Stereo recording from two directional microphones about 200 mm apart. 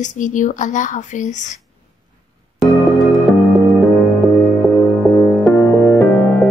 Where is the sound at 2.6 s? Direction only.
Centre (ahead or behind).